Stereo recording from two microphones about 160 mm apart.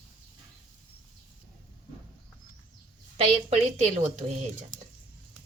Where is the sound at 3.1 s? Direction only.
40° right (ahead or behind).